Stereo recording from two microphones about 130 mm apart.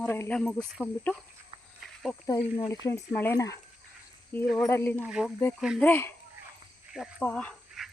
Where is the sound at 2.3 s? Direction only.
25° left (ahead or behind).